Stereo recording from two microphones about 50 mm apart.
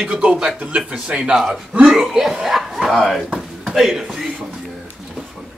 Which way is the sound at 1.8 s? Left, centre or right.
Centre.